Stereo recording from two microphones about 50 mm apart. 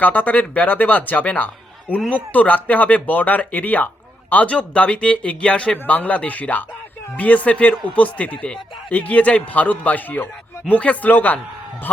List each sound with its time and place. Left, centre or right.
0.0 s speech: left